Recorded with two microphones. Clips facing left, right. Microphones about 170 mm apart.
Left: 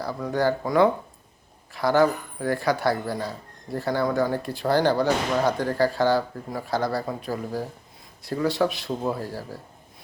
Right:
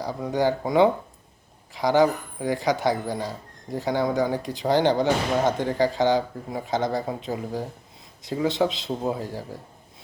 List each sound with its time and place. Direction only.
0.0 s speech: 15° right (ahead or behind)